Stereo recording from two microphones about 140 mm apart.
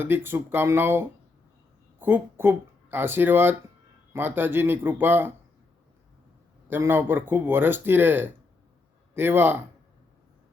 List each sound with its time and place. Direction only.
0.0 s speech: 15° right (ahead or behind)
6.7 s speech: 15° right (ahead or behind)